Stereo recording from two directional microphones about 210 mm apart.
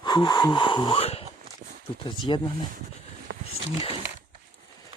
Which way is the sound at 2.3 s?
20° left (ahead or behind).